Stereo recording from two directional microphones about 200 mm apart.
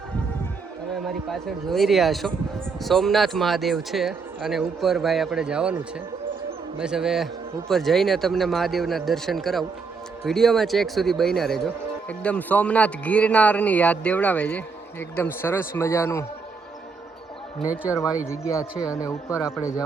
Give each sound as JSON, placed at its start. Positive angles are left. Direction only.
{"t": 1.0, "sound": "speech", "side_deg": 0}
{"t": 6.7, "sound": "speech", "side_deg": -5}
{"t": 17.8, "sound": "speech", "side_deg": 15}